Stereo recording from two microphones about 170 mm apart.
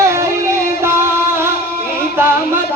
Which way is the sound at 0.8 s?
15° right (ahead or behind).